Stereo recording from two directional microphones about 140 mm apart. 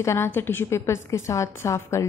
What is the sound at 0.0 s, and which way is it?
A woman's voice, 20° left (ahead or behind).